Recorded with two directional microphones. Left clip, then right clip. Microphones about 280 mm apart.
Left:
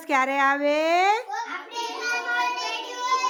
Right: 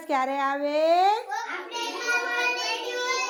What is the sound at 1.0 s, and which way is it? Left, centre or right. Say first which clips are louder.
Speech: left 1 dB; left.